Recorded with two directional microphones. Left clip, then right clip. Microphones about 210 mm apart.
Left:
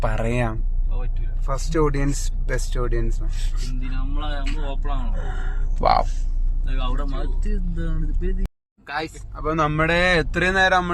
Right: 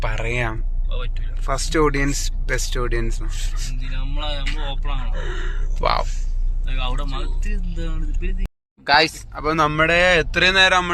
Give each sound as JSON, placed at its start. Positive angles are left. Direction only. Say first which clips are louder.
{"t": 0.0, "sound": "speech", "louder": "even", "side_deg": 25}
{"t": 1.5, "sound": "speech", "louder": "right 3 dB", "side_deg": -5}
{"t": 2.8, "sound": "speech", "louder": "right 2 dB", "side_deg": 0}
{"t": 4.1, "sound": "speech", "louder": "right 4 dB", "side_deg": 30}
{"t": 5.1, "sound": "speech", "louder": "right 4 dB", "side_deg": 15}
{"t": 8.8, "sound": "speech", "louder": "right 13 dB", "side_deg": -40}
{"t": 9.3, "sound": "speech", "louder": "right 3 dB", "side_deg": -15}
{"t": 9.6, "sound": "speech", "louder": "right 3 dB", "side_deg": 0}
{"t": 10.6, "sound": "speech", "louder": "right 1 dB", "side_deg": 0}